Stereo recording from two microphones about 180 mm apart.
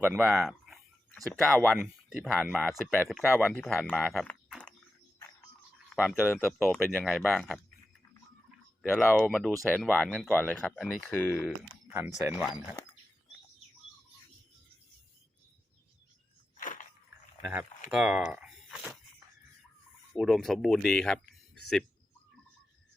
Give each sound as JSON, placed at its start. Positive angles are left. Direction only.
{"t": 0.3, "sound": "a sound", "side_deg": 0}
{"t": 1.5, "sound": "speech", "side_deg": 10}
{"t": 1.8, "sound": "speech", "side_deg": 0}
{"t": 5.9, "sound": "speech", "side_deg": 0}
{"t": 6.2, "sound": "speech", "side_deg": 10}
{"t": 6.9, "sound": "speech", "side_deg": 0}
{"t": 8.9, "sound": "speech", "side_deg": 10}
{"t": 12.2, "sound": "speech", "side_deg": -10}
{"t": 16.6, "sound": "a sound", "side_deg": 45}
{"t": 17.4, "sound": "speech", "side_deg": -10}
{"t": 20.1, "sound": "speech", "side_deg": 0}